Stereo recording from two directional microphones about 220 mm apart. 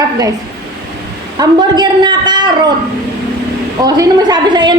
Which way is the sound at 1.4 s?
20° right (ahead or behind).